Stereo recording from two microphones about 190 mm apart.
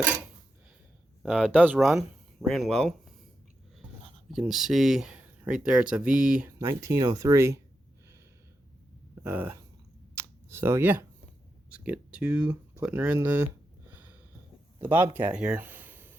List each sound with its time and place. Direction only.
1.2 s speech: 5° right (ahead or behind)
4.3 s speech: centre (ahead or behind)
9.2 s speech: 10° right (ahead or behind)
10.2 s a sound: 15° right (ahead or behind)
11.7 s speech: 5° right (ahead or behind)
14.8 s speech: 10° right (ahead or behind)